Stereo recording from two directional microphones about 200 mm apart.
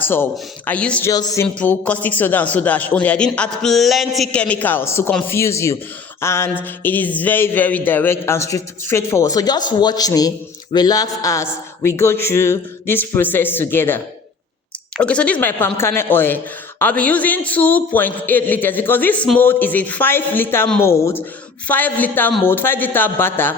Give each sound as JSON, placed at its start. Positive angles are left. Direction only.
{"t": 0.0, "sound": "a man's voice", "side_deg": 10}
{"t": 1.1, "sound": "a man's voice", "side_deg": 20}
{"t": 1.5, "sound": "a man's voice", "side_deg": 5}